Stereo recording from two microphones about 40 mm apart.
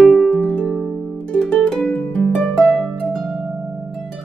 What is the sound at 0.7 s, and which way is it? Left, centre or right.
Music, centre.